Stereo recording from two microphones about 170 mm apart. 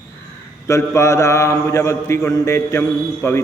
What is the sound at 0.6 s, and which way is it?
A man's voice, 15° left (ahead or behind).